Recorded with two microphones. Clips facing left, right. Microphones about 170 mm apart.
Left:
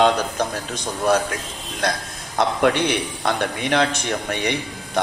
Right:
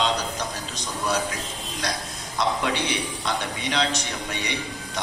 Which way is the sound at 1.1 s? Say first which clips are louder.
Left 7 dB; 55° left (ahead or behind).